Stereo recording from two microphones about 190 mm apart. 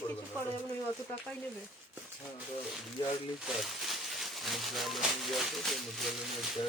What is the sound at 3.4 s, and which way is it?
Speech, centre (ahead or behind).